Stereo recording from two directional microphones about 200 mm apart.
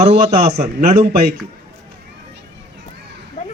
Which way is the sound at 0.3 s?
50° right (ahead or behind).